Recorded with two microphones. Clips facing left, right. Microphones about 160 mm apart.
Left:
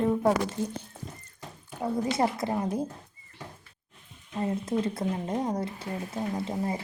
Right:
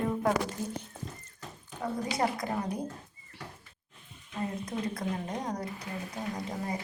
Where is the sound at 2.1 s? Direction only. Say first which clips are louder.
Left 3 dB; 25° left (ahead or behind).